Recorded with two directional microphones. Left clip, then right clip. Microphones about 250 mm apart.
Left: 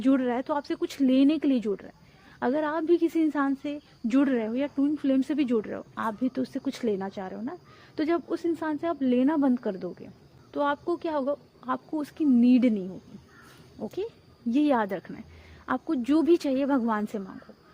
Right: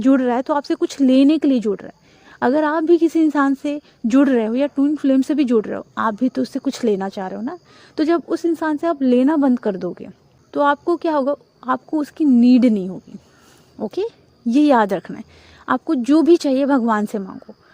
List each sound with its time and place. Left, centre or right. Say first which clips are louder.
0.0 s a woman's voice: right 9 dB; right